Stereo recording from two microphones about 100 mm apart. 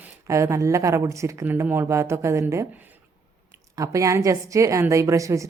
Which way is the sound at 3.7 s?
35° right (ahead or behind).